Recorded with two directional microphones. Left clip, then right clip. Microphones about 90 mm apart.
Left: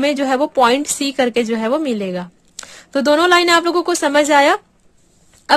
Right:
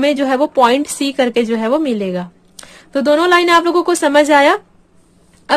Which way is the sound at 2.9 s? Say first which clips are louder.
Right 1 dB; 65° left (ahead or behind).